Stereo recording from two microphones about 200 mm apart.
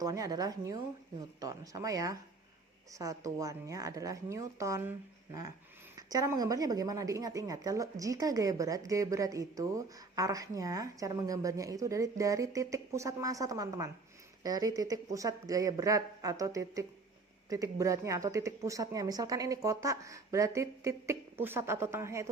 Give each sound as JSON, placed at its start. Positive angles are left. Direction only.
{"t": 0.0, "sound": "speech", "side_deg": -15}